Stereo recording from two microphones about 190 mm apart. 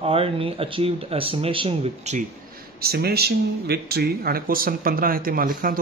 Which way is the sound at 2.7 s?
55° right (ahead or behind).